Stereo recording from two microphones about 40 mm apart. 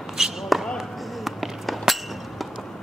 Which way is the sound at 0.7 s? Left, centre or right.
Centre.